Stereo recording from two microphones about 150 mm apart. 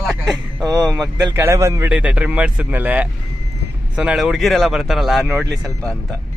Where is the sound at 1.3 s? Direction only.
20° right (ahead or behind).